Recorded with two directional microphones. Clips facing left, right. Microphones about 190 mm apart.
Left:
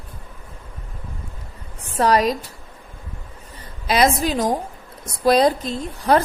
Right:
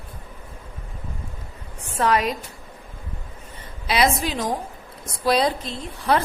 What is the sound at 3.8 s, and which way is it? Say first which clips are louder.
A woman's voice: left 3 dB; 45° left (ahead or behind).